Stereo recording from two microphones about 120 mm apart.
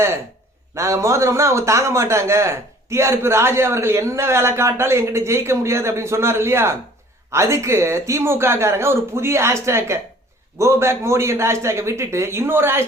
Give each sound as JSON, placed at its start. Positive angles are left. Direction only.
{"t": 0.8, "sound": "a man's voice", "side_deg": -25}